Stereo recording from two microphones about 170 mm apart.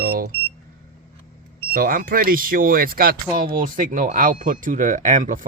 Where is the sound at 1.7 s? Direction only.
55° right (ahead or behind).